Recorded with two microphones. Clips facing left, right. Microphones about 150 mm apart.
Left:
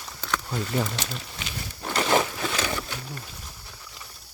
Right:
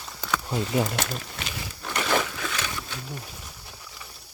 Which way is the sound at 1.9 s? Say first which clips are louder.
Left 3 dB; 25° left (ahead or behind).